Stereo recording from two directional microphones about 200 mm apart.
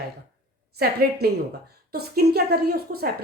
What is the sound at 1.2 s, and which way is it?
A woman's voice, 50° right (ahead or behind).